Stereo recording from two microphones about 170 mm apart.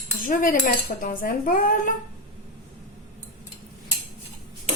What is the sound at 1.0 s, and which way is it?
Speech, 55° left (ahead or behind).